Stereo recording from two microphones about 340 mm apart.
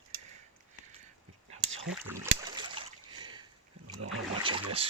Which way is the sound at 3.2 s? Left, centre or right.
Centre.